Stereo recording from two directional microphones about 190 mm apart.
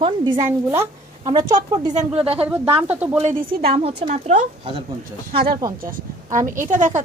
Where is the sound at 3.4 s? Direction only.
50° right (ahead or behind).